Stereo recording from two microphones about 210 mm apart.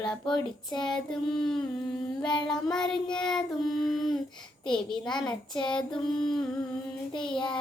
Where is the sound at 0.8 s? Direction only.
5° left (ahead or behind).